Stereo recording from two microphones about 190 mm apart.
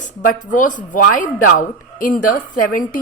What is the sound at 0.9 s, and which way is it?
Speech, 45° left (ahead or behind).